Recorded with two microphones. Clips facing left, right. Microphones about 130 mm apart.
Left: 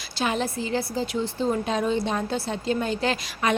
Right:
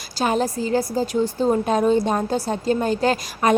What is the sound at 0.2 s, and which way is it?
Speech, 40° right (ahead or behind).